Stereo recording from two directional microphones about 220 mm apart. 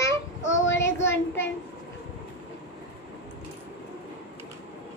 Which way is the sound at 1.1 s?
10° left (ahead or behind).